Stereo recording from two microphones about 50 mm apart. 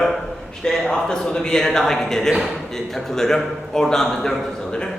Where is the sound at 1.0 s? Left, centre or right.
Centre.